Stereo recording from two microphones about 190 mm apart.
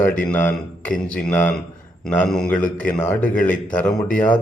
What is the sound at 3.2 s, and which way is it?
Speech, 45° left (ahead or behind).